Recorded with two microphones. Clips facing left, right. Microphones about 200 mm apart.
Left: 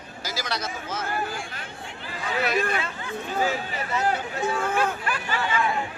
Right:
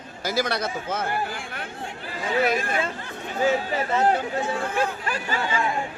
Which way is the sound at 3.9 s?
30° right (ahead or behind).